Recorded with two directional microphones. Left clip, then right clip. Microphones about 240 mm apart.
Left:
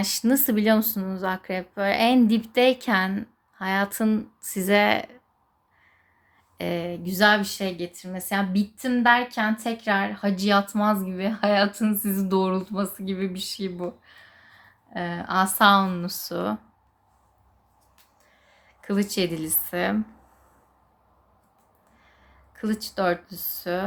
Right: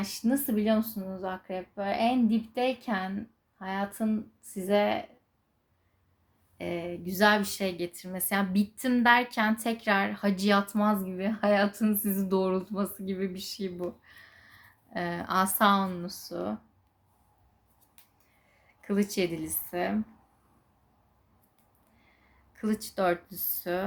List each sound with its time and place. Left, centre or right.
0.0 s speech: left
6.6 s speech: left
18.8 s speech: centre
22.5 s speech: centre